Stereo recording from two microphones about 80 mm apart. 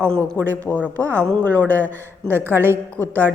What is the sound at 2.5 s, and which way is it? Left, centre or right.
Speech, right.